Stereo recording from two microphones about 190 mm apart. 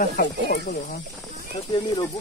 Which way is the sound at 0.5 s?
50° left (ahead or behind).